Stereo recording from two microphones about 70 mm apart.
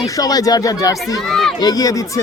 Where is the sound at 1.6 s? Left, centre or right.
Left.